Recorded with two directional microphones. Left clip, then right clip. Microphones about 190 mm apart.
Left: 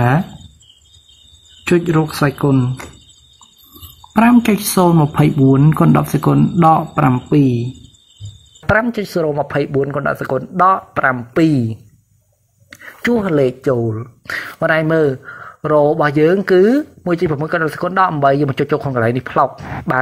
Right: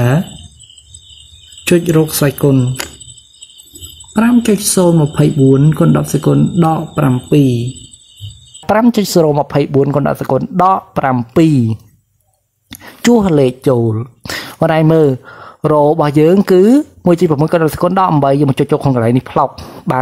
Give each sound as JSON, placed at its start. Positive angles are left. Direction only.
{"t": 1.8, "sound": "speech", "side_deg": -20}
{"t": 4.1, "sound": "speech", "side_deg": -5}
{"t": 8.8, "sound": "speech", "side_deg": -50}